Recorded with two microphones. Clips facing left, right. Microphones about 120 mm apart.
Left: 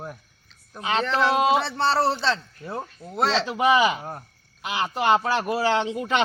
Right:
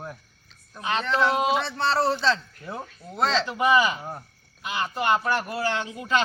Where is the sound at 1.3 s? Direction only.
85° left.